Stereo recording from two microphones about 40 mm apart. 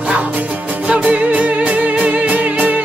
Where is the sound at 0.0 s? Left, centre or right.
Right.